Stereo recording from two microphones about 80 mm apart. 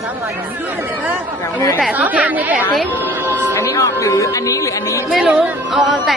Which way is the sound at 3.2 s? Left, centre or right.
Right.